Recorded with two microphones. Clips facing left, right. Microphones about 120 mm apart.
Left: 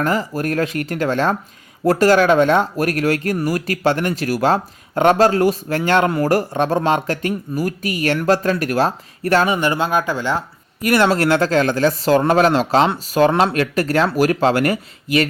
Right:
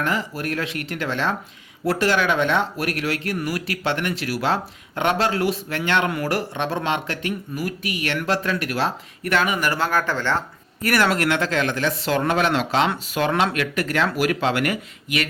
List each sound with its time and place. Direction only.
0.0 s speech: 40° left (ahead or behind)